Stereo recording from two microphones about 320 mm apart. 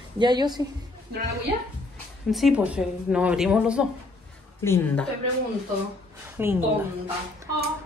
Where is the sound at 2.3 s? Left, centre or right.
Centre.